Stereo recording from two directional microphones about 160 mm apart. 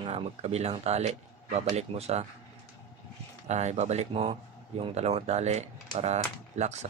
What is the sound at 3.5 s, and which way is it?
Speech, 45° right (ahead or behind).